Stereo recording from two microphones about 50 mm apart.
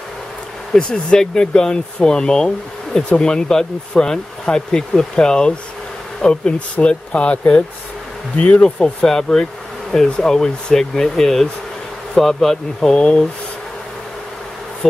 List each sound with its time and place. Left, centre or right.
0.7 s speech: centre
12.9 s speech: left